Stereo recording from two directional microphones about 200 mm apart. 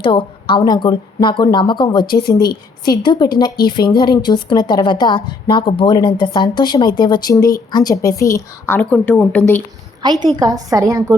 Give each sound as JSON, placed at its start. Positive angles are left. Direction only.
{"t": 0.0, "sound": "a woman's voice", "side_deg": 25}
{"t": 10.0, "sound": "a woman's voice", "side_deg": -20}